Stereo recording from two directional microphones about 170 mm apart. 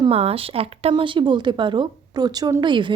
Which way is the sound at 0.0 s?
35° right (ahead or behind).